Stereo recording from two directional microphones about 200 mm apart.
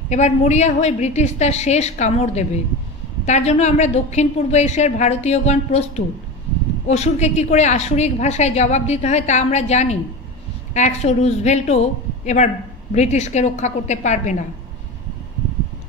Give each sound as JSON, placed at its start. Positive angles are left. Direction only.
{"t": 0.1, "sound": "a woman's voice", "side_deg": 35}